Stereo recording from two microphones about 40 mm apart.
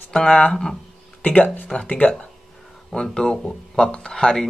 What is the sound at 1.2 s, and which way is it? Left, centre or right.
Speech, left.